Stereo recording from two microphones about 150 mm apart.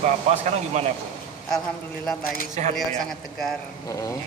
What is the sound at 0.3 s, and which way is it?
Speech, 50° right (ahead or behind).